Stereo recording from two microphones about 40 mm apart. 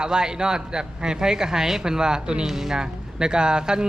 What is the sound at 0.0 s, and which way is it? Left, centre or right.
A man's voice, centre.